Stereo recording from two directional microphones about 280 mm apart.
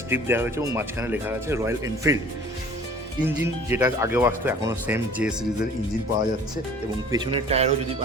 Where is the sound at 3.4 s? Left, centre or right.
Centre.